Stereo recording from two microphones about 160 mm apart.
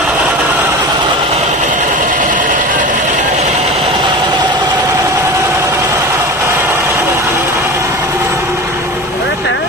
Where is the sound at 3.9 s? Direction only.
25° right (ahead or behind).